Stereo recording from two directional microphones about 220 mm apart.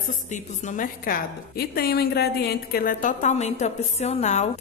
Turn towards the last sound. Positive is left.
turn(degrees=30)  # may be behind; listen again after turning